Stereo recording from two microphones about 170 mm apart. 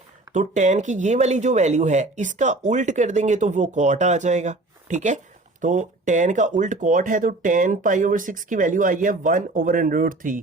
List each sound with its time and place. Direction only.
0.3 s speech: 45° right (ahead or behind)